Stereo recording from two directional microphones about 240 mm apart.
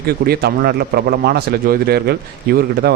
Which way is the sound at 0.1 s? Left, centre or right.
Right.